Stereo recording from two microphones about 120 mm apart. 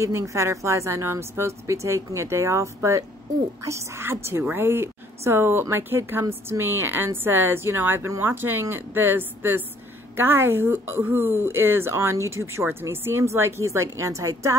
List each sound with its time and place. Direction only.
0.0 s a woman's voice: 25° right (ahead or behind)